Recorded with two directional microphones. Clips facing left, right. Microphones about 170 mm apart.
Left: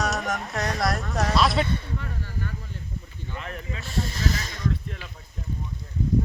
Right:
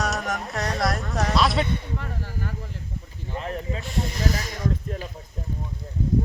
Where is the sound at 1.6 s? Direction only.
20° right (ahead or behind).